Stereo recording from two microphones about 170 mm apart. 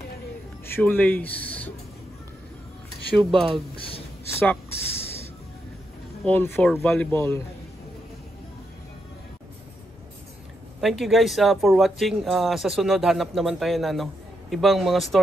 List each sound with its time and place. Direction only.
0.7 s speech: 10° left (ahead or behind)
3.2 s speech: centre (ahead or behind)
3.7 s a sound: 35° left (ahead or behind)
4.4 s speech: 15° left (ahead or behind)
6.2 s speech: 10° left (ahead or behind)
7.1 s speech: 15° left (ahead or behind)
10.8 s speech: centre (ahead or behind)